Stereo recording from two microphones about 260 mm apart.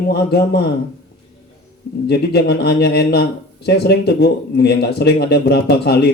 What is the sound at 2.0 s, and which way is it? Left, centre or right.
A man's voice, left.